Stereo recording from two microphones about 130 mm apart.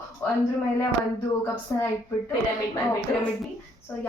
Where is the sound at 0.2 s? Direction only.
20° left (ahead or behind).